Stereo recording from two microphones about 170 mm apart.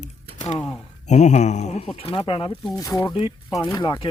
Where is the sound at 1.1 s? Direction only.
45° left (ahead or behind).